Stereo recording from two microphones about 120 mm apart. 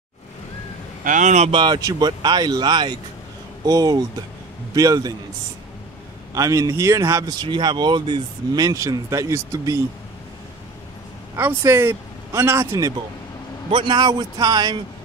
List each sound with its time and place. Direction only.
1.0 s speech: 90° right
1.5 s speech: 40° right (ahead or behind)
6.3 s speech: 30° right (ahead or behind)
11.3 s speech: 20° right (ahead or behind)
13.7 s speech: 45° right (ahead or behind)